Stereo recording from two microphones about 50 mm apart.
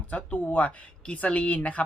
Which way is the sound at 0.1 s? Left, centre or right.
Left.